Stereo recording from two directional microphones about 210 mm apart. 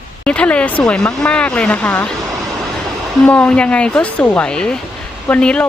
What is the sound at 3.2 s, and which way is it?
Speech, 5° left (ahead or behind).